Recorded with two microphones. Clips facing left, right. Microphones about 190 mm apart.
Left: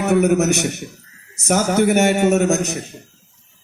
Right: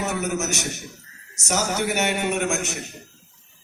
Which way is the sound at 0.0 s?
60° left (ahead or behind).